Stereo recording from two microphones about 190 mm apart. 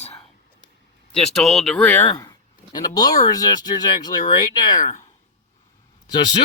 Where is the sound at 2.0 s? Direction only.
20° left (ahead or behind).